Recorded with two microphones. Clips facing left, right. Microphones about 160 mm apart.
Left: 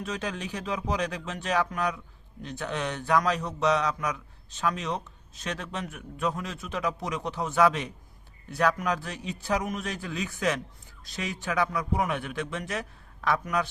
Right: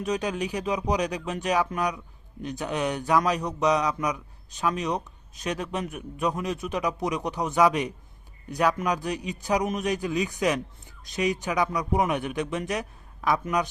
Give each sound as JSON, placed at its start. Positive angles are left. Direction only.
{"t": 0.0, "sound": "a man's voice", "side_deg": -15}